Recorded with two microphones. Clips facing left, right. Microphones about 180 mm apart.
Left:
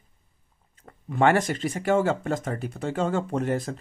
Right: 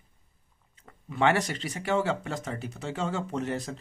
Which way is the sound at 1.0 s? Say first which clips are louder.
Left 4 dB; 50° left (ahead or behind).